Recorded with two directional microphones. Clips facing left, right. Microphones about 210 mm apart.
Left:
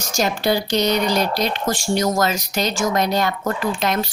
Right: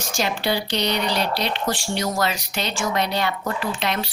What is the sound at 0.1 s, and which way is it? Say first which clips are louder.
Speech: left 4 dB; 45° left (ahead or behind).